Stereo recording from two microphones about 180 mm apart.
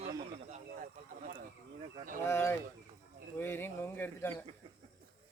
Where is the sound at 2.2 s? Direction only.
15° left (ahead or behind).